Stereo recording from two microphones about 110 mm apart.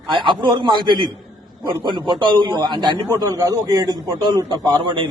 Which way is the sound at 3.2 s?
30° right (ahead or behind).